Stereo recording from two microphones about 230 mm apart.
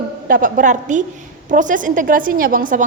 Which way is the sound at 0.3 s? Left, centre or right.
Right.